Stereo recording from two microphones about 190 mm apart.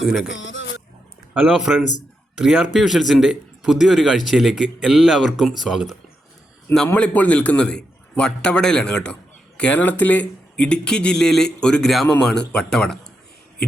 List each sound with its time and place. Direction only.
0.3 s speech: 75° left (ahead or behind)
1.3 s a man's voice: 5° right (ahead or behind)